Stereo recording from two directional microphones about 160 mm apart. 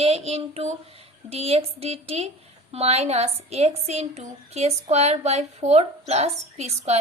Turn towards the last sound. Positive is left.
turn(degrees=-40)  # may be behind; listen again after turning